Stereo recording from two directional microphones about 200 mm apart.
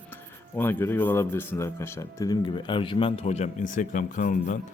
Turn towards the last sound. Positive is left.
turn(degrees=40)  # may be behind; listen again after turning